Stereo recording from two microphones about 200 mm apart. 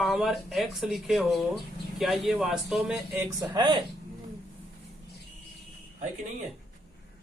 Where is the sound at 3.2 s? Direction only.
20° right (ahead or behind).